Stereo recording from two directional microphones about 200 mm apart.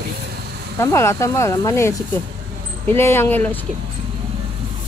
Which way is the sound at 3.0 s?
10° left (ahead or behind).